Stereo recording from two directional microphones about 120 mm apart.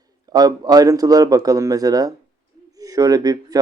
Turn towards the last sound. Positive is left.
turn(degrees=-30)  # may be behind; listen again after turning